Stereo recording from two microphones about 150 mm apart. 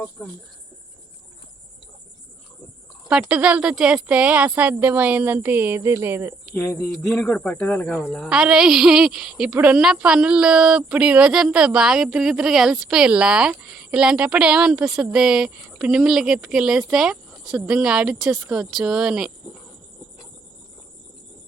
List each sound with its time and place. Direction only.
0.2 s speech: 10° left (ahead or behind)
3.1 s speech: 5° right (ahead or behind)
6.5 s speech: 15° left (ahead or behind)
6.9 s speech: 5° left (ahead or behind)
7.2 s speech: 15° left (ahead or behind)
8.3 s speech: 5° right (ahead or behind)